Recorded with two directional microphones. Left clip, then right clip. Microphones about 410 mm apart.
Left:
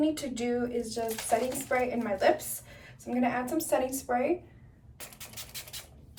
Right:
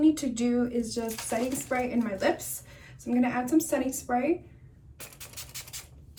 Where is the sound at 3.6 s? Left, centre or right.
Centre.